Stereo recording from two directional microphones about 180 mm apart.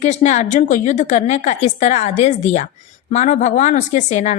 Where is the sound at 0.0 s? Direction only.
40° left (ahead or behind).